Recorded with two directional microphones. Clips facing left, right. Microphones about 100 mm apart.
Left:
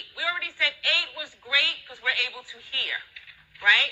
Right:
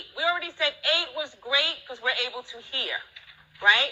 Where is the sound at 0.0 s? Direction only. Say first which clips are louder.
Right 5 dB; 25° right (ahead or behind).